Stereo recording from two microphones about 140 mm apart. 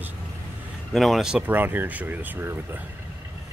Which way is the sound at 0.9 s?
Centre (ahead or behind).